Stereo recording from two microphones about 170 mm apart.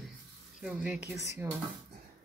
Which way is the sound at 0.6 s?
5° right (ahead or behind).